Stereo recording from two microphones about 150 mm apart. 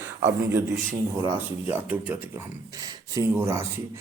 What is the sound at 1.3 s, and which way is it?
Speech, 15° right (ahead or behind).